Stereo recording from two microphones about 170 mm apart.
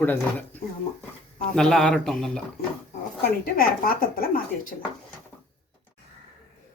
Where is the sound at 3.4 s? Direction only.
60° left (ahead or behind).